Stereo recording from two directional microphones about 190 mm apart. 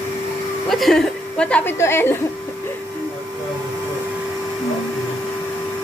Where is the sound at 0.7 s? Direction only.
Centre (ahead or behind).